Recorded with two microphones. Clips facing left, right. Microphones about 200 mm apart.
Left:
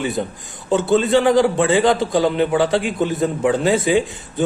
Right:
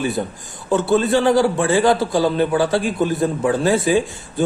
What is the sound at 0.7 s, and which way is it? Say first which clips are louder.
A man's voice: even; 20° left (ahead or behind).